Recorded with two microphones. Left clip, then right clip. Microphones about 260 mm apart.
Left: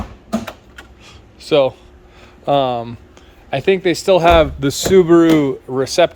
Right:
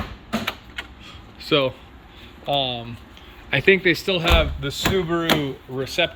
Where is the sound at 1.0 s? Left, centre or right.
Centre.